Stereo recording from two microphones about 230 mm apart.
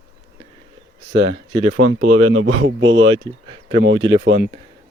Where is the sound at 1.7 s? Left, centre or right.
Right.